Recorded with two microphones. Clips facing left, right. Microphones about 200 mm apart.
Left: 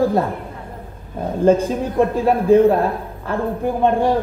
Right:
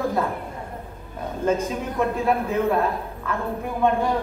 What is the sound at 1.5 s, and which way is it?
Speech, 30° left (ahead or behind).